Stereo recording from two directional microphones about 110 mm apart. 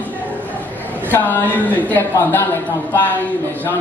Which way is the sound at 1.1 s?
15° left (ahead or behind).